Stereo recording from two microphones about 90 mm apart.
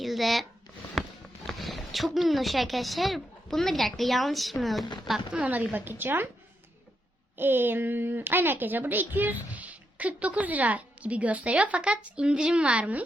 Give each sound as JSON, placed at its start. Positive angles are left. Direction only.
{"t": 0.0, "sound": "a sound", "side_deg": 0}
{"t": 1.5, "sound": "speech", "side_deg": 0}
{"t": 5.4, "sound": "a woman's voice", "side_deg": -20}
{"t": 7.3, "sound": "speech", "side_deg": -25}